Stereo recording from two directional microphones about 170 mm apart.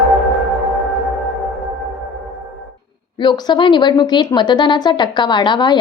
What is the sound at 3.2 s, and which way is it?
A woman's voice, 25° left (ahead or behind).